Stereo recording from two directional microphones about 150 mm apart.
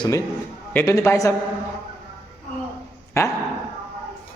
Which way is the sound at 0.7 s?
15° left (ahead or behind).